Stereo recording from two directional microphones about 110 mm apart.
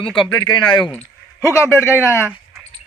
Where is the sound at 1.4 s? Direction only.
25° left (ahead or behind).